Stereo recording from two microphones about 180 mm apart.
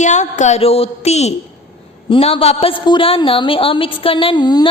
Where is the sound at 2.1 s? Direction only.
30° left (ahead or behind).